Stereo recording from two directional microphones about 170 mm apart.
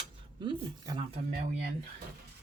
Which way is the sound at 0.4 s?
30° right (ahead or behind).